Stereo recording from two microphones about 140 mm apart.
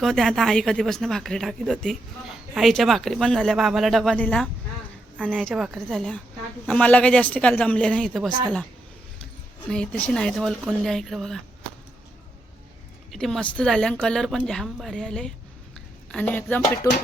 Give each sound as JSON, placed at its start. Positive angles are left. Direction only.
{"t": 0.0, "sound": "speech", "side_deg": 5}
{"t": 9.6, "sound": "speech", "side_deg": 5}
{"t": 13.1, "sound": "speech", "side_deg": 0}
{"t": 15.7, "sound": "a sound", "side_deg": 10}
{"t": 16.9, "sound": "speech", "side_deg": 25}